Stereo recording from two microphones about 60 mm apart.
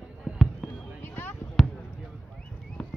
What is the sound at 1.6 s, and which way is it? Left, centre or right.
Basketball bounce, centre.